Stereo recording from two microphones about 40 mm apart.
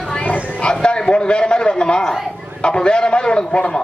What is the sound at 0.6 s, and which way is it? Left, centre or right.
A man's voice, left.